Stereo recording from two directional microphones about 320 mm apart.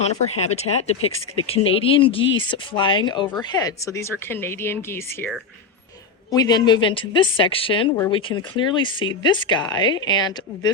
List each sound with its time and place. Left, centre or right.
0.0 s speech: left